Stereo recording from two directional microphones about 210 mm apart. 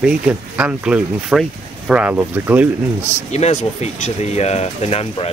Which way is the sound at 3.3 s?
30° left (ahead or behind).